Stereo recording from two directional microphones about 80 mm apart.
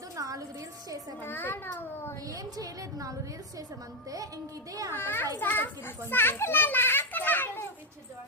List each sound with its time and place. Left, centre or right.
0.2 s music: right
1.2 s a child's voice: left
2.3 s a woman's voice: right
4.7 s a woman's voice: right
4.9 s a child's voice: left